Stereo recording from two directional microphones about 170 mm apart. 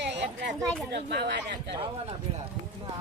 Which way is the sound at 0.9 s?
80° right.